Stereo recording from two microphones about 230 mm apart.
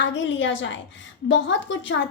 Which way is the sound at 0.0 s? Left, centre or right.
Left.